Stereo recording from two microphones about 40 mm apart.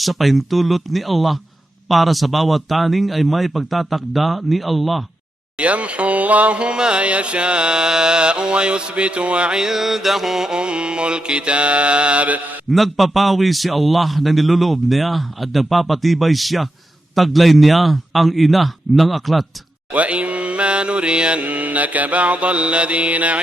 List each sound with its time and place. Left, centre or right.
0.0 s a man's voice: centre
5.5 s a sound: right
9.6 s mantra: centre
10.6 s a sound: right
12.7 s a man's voice: centre
19.9 s mantra: right